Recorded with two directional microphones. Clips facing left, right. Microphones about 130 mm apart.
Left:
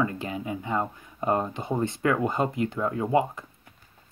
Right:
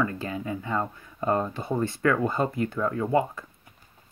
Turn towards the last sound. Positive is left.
turn(degrees=20)  # may be behind; listen again after turning